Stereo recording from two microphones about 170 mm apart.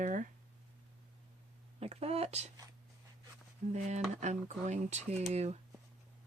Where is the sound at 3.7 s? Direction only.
45° right (ahead or behind).